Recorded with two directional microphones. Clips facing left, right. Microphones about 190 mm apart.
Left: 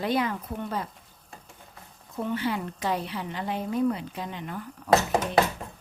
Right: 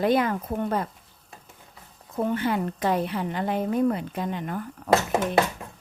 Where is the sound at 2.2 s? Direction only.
50° right (ahead or behind).